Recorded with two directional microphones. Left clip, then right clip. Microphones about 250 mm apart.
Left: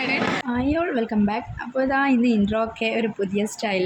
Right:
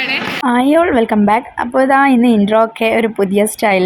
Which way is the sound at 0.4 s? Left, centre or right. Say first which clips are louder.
Right 12 dB; right.